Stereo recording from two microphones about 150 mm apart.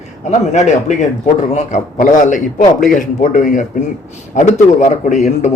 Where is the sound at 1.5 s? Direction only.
55° left (ahead or behind).